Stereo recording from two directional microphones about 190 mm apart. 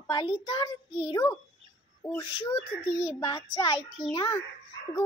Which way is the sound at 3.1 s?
25° left (ahead or behind).